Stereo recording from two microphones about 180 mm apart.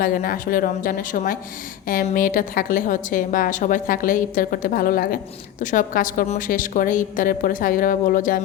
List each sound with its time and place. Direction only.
0.0 s a woman's voice: 50° left (ahead or behind)